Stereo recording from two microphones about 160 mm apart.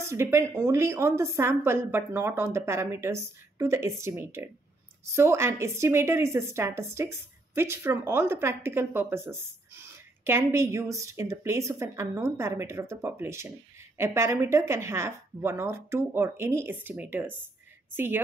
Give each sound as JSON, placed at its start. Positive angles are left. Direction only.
{"t": 0.0, "sound": "a woman's voice", "side_deg": -15}